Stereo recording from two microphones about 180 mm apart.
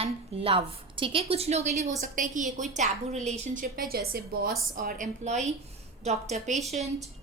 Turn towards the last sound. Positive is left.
turn(degrees=-40)  # may be behind; listen again after turning